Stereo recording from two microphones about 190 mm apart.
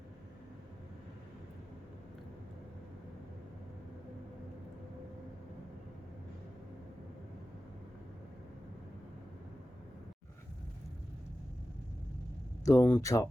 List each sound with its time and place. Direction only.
12.6 s speech: 15° left (ahead or behind)